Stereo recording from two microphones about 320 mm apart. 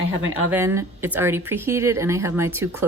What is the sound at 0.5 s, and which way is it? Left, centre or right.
Speech, centre.